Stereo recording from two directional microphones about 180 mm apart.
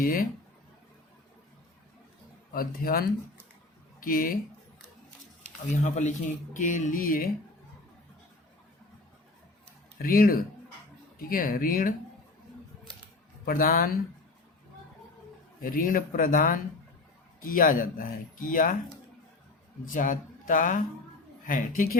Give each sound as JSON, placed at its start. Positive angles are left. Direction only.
{"t": 0.0, "sound": "speech", "side_deg": 50}
{"t": 2.5, "sound": "speech", "side_deg": 55}
{"t": 5.7, "sound": "speech", "side_deg": 40}
{"t": 10.0, "sound": "speech", "side_deg": 55}
{"t": 13.4, "sound": "speech", "side_deg": 55}
{"t": 15.6, "sound": "speech", "side_deg": 50}
{"t": 19.8, "sound": "speech", "side_deg": 50}